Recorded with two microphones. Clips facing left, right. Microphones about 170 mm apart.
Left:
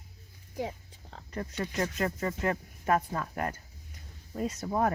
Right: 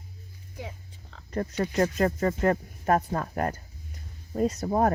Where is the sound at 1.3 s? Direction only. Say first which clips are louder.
Right 7 dB; 40° right (ahead or behind).